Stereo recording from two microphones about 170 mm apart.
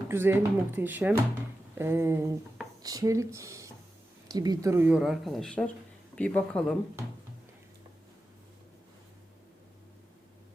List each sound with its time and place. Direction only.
0.1 s speech: 15° right (ahead or behind); by 6.7 s 5° left (ahead or behind)